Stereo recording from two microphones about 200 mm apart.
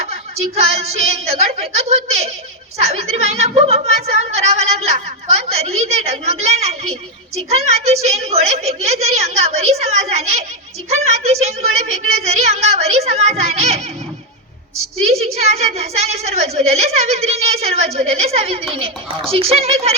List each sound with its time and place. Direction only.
0.0 s a woman's voice: 30° right (ahead or behind)
15.1 s a woman's voice: 30° right (ahead or behind)